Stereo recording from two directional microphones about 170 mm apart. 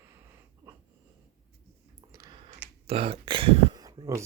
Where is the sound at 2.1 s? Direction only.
20° right (ahead or behind).